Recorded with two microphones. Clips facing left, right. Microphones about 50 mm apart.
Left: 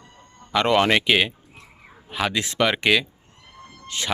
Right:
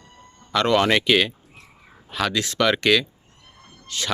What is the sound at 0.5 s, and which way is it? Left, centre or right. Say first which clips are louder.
Speech: even; centre.